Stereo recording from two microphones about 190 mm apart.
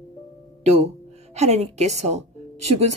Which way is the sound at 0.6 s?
35° right (ahead or behind).